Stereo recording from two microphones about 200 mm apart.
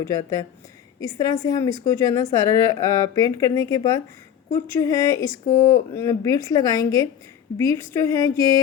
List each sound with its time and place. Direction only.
0.0 s speech: 15° left (ahead or behind)